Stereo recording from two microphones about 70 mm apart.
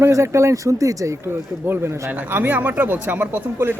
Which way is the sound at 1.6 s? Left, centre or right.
Right.